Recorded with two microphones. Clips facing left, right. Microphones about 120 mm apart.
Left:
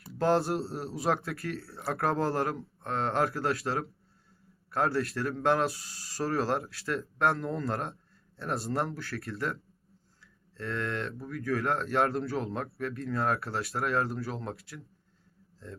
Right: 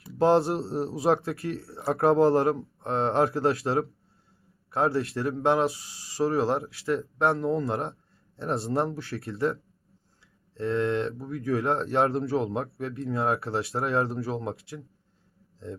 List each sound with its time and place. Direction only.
0.0 s speech: 25° right (ahead or behind)